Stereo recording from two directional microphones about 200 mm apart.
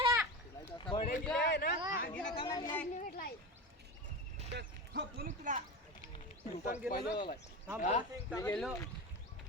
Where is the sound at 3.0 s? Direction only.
45° left (ahead or behind).